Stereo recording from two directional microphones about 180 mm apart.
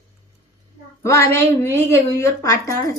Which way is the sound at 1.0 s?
15° left (ahead or behind).